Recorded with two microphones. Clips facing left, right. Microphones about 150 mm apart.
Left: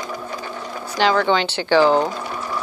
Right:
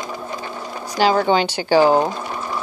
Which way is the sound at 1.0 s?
40° right (ahead or behind).